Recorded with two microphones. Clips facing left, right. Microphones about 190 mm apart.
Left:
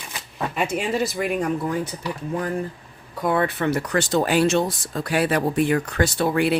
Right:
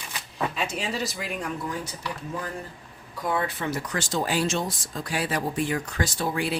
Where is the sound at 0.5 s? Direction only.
55° left (ahead or behind).